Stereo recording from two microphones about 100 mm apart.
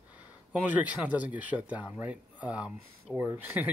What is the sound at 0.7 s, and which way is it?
Speech, 15° right (ahead or behind).